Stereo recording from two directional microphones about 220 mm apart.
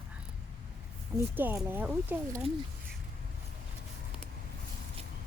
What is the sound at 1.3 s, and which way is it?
Speech, 10° right (ahead or behind).